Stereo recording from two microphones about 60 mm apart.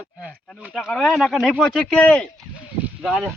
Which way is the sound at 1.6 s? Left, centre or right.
Centre.